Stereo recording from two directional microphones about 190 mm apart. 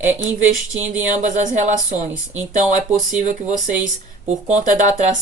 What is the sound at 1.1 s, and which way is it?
Speech, 40° right (ahead or behind).